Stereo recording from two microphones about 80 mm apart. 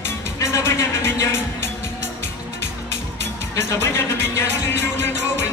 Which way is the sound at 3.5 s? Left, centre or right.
Left.